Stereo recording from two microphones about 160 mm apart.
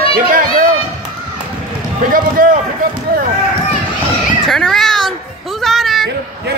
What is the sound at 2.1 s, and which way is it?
Run, 60° right (ahead or behind).